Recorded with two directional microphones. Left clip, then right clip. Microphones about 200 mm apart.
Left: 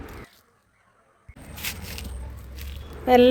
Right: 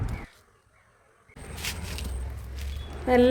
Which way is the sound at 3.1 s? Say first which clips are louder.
Left 5 dB; 5° left (ahead or behind).